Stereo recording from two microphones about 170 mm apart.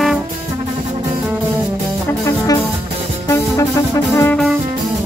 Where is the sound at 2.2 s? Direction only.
20° left (ahead or behind).